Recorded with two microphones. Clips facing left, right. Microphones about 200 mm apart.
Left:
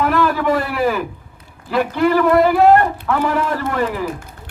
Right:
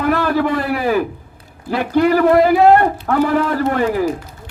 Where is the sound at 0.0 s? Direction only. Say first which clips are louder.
Right 1 dB; 40° right (ahead or behind).